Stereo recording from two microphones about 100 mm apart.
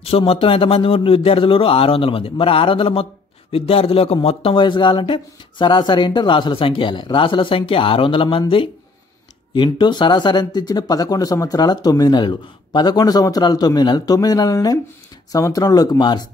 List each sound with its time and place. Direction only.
0.3 s a man's voice: 65° left (ahead or behind)
9.5 s speech: 50° left (ahead or behind)